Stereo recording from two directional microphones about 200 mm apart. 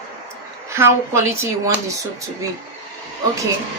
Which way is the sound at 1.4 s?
15° right (ahead or behind).